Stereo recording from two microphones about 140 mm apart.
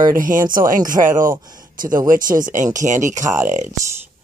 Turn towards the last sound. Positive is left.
turn(degrees=-60)  # may be behind; listen again after turning